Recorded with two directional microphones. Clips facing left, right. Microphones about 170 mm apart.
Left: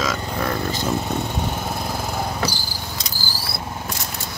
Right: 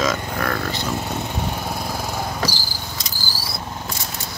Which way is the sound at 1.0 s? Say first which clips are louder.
Left 1 dB; centre (ahead or behind).